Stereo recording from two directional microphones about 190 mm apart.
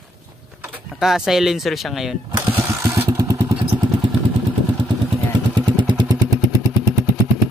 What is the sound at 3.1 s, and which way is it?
Motorcycle, 20° right (ahead or behind).